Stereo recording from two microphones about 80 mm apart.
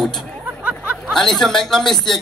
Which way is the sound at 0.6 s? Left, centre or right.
Centre.